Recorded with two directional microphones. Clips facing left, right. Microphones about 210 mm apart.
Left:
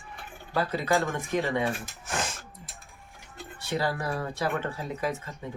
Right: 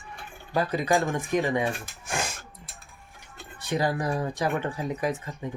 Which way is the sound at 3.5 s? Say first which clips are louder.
Right 3 dB; 15° right (ahead or behind).